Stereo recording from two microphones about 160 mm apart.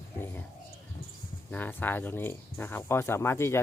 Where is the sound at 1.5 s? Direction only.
10° left (ahead or behind).